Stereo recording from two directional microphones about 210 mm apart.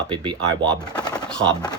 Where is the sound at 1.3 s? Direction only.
5° left (ahead or behind).